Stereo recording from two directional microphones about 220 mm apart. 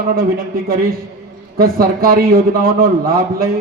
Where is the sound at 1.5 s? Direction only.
40° right (ahead or behind).